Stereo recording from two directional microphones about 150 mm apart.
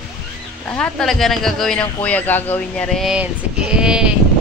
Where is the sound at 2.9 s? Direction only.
Centre (ahead or behind).